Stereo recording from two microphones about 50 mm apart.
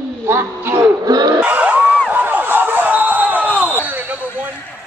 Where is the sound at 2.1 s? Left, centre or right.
Right.